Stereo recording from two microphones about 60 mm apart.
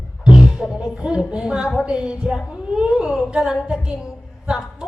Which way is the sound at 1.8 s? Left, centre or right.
Centre.